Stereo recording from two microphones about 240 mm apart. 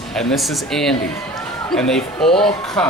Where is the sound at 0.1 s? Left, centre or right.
Centre.